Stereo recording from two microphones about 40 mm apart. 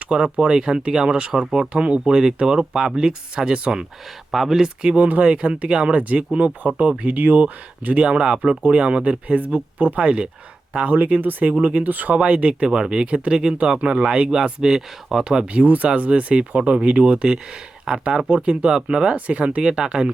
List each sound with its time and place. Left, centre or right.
0.3 s speech: right
4.3 s speech: centre
4.9 s speech: right
6.0 s speech: right
10.8 s speech: right; by 15.4 s centre
15.5 s speech: right
19.1 s speech: right
19.5 s speech: right